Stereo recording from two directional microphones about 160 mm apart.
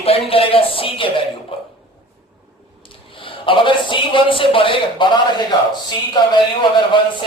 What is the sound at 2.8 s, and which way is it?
A man's voice, 35° left (ahead or behind).